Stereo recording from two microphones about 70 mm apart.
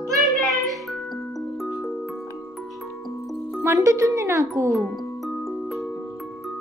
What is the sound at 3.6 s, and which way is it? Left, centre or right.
Speech, right.